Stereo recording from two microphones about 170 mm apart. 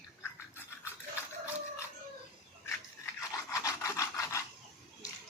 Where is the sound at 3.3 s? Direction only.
15° left (ahead or behind).